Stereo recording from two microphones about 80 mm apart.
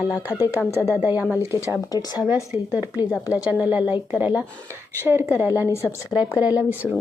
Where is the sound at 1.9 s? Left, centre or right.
Left.